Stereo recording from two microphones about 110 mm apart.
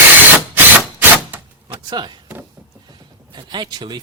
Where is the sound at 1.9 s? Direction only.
40° right (ahead or behind).